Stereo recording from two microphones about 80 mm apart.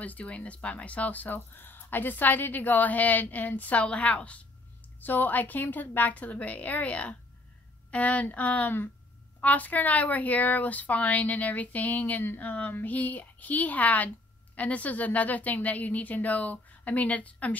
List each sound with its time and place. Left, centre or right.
0.0 s speech: centre